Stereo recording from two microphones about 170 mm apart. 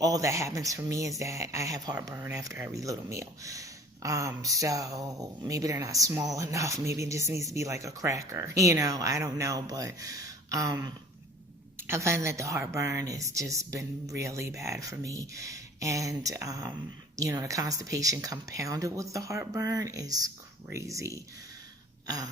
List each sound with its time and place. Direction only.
0.0 s a woman's voice: 20° right (ahead or behind)
22.0 s throat clearing: 20° right (ahead or behind)